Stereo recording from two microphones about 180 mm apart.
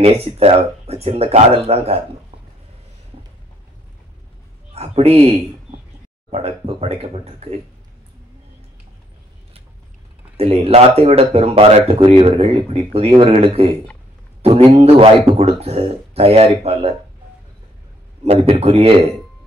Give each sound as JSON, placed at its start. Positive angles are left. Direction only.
{"t": 0.0, "sound": "speech", "side_deg": -35}
{"t": 4.7, "sound": "speech", "side_deg": -35}
{"t": 6.3, "sound": "speech", "side_deg": -35}
{"t": 10.3, "sound": "speech", "side_deg": -35}
{"t": 18.2, "sound": "speech", "side_deg": -35}